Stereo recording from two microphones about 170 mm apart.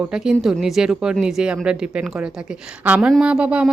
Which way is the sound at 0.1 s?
5° right (ahead or behind).